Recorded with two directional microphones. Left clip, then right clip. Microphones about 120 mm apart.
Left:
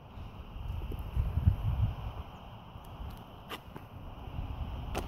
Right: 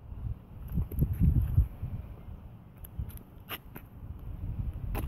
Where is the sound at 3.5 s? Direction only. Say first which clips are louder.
Right 2 dB; 45° right (ahead or behind).